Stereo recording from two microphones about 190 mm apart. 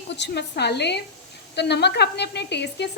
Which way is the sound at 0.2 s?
60° left (ahead or behind).